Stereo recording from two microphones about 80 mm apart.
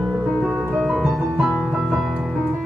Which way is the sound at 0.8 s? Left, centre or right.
Centre.